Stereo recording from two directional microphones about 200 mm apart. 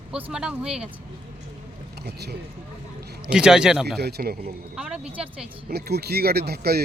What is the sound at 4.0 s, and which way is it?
Speech, 50° right (ahead or behind).